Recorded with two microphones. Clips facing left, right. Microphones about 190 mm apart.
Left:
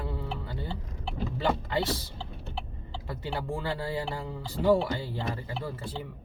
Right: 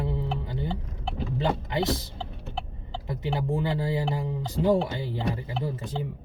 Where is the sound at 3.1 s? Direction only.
20° right (ahead or behind).